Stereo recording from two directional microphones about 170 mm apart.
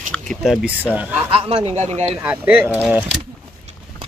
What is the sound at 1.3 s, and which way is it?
Speech, 35° right (ahead or behind).